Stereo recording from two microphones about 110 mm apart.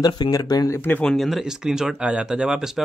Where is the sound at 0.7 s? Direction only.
20° left (ahead or behind).